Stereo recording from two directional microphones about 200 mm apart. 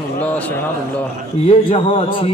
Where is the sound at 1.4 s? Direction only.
25° left (ahead or behind).